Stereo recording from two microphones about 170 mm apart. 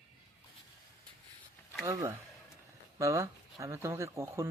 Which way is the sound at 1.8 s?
20° right (ahead or behind).